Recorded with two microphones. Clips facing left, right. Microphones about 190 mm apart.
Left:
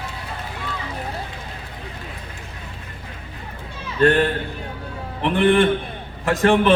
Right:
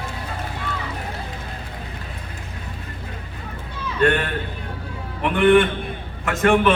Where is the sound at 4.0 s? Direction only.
35° left (ahead or behind).